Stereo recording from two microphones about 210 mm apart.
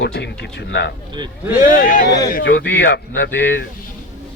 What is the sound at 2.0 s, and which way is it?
A man's voice, 55° left (ahead or behind).